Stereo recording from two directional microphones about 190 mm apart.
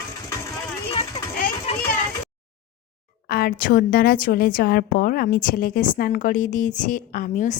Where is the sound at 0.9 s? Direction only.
30° left (ahead or behind).